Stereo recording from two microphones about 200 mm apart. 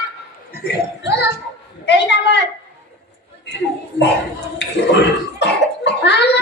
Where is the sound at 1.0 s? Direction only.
60° left (ahead or behind).